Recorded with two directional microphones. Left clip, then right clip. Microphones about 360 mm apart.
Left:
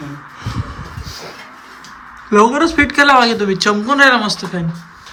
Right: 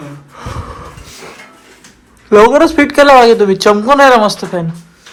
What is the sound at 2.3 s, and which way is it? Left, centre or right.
Speech, centre.